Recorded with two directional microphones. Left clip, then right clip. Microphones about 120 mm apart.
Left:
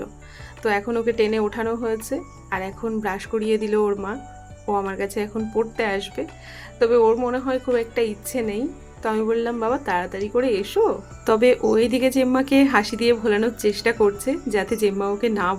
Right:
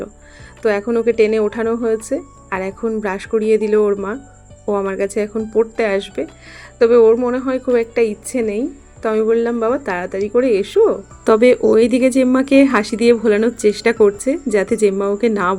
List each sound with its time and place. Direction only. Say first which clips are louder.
0.6 s a woman's voice: right 6 dB; 35° right (ahead or behind)